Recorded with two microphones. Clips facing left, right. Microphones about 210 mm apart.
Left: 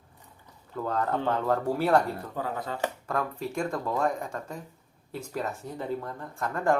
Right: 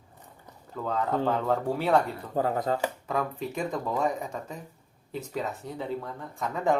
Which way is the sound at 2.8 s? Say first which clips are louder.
Right 1 dB; 5° right (ahead or behind).